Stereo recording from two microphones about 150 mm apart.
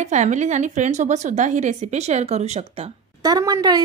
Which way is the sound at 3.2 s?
25° right (ahead or behind).